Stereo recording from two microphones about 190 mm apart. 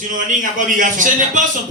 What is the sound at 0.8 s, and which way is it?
Speech, 45° right (ahead or behind).